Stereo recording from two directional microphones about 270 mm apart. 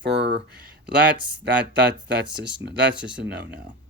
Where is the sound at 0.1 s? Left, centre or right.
Right.